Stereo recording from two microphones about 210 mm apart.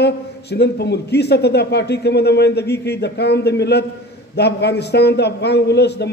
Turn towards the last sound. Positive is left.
turn(degrees=50)  # may be behind; listen again after turning